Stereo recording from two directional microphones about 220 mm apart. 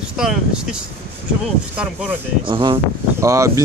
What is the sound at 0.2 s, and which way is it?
Speech, centre (ahead or behind).